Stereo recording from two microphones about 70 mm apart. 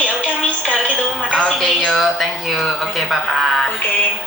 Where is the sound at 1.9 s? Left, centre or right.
Centre.